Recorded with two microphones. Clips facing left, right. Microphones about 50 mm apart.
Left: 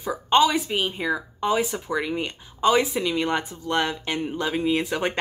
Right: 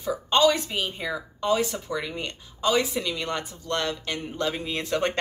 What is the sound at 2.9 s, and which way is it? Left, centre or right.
Speech, centre.